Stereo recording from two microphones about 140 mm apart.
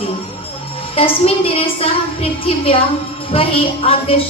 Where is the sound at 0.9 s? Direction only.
45° left (ahead or behind).